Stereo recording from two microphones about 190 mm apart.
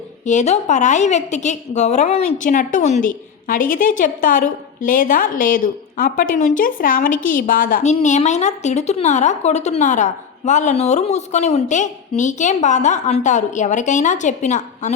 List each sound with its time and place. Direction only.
0.3 s a woman's voice: 35° left (ahead or behind)